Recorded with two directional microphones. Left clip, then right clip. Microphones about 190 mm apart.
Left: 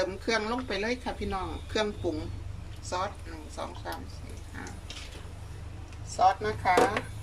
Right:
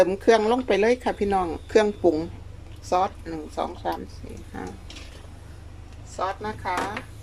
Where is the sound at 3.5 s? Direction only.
45° right (ahead or behind).